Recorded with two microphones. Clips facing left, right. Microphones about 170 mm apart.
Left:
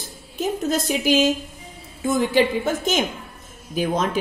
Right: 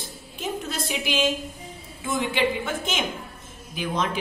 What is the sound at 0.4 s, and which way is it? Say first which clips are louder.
A woman's voice: left 8 dB; 45° left (ahead or behind).